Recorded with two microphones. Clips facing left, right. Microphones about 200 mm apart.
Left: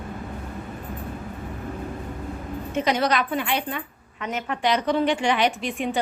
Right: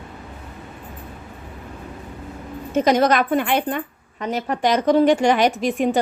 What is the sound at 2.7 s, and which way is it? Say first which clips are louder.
A woman's voice: right 6 dB; 45° right (ahead or behind).